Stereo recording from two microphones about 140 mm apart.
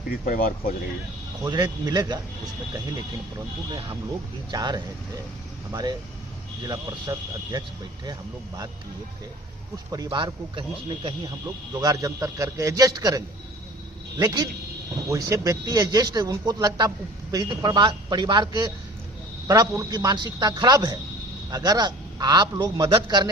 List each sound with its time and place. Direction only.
0.1 s speech: 90° left
1.5 s speech: 30° right (ahead or behind)
3.7 s speech: 35° right (ahead or behind)
9.7 s speech: 30° right (ahead or behind)